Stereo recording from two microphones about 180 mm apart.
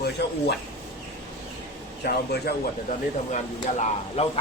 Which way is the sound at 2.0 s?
65° left (ahead or behind).